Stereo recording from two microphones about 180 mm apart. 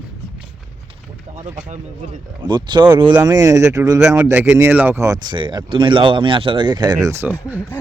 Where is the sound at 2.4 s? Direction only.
25° right (ahead or behind).